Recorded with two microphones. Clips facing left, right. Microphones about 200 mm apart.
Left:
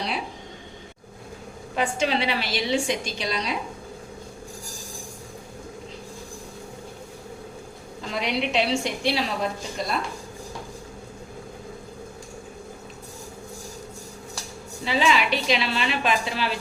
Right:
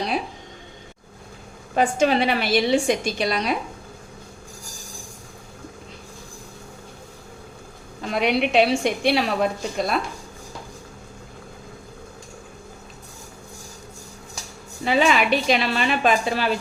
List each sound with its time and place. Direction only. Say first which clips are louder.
1.7 s a woman's voice: right 5 dB; 45° right (ahead or behind)
8.0 s a woman's voice: right 5 dB; 60° right (ahead or behind)
14.8 s a woman's voice: right 4 dB; 50° right (ahead or behind)